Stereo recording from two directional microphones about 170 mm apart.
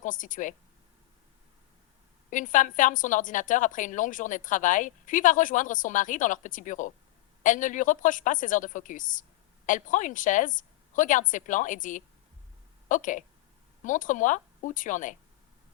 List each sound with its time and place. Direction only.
0.0 s a woman's voice: 50° left (ahead or behind)
2.3 s a woman's voice: 50° left (ahead or behind)